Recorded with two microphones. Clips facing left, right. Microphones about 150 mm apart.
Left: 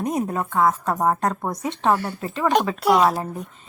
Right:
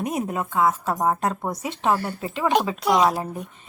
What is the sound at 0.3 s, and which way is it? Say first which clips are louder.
A woman's voice: even; 15° right (ahead or behind).